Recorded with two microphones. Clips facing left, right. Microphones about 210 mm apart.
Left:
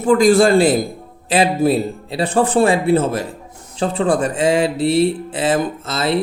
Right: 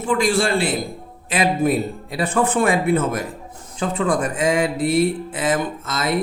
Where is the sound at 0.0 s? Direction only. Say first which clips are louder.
Left 7 dB; 40° left (ahead or behind).